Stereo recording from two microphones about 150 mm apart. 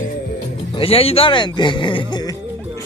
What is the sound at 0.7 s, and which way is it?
Speech, 40° left (ahead or behind).